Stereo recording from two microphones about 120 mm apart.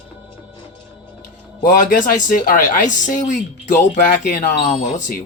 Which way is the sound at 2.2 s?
90° left.